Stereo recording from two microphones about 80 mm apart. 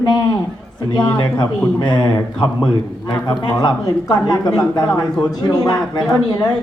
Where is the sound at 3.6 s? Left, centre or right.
Left.